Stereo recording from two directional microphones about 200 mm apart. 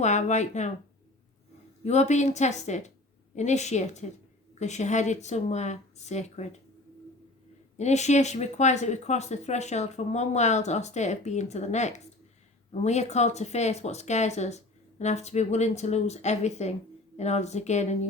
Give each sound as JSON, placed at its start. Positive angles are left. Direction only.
{"t": 0.0, "sound": "speech", "side_deg": 35}
{"t": 1.8, "sound": "speech", "side_deg": 35}
{"t": 7.8, "sound": "speech", "side_deg": 35}